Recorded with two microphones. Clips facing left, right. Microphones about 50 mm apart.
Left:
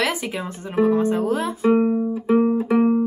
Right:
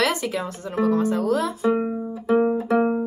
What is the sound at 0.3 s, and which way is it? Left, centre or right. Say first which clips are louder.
Speech: right 1 dB; left.